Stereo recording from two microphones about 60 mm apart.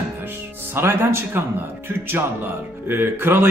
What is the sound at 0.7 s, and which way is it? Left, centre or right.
A man's voice, right.